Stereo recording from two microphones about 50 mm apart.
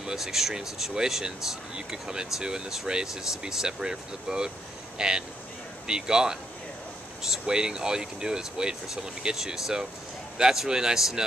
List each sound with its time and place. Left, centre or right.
0.0 s speech: centre